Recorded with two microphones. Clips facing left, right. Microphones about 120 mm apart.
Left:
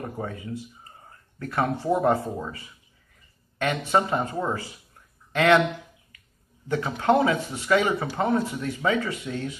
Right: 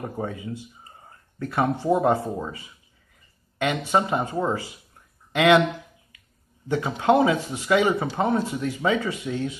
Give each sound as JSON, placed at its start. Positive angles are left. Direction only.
{"t": 0.0, "sound": "speech", "side_deg": -15}
{"t": 6.7, "sound": "speech", "side_deg": -15}